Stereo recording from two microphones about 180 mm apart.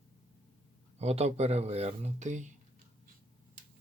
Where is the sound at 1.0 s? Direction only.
35° right (ahead or behind).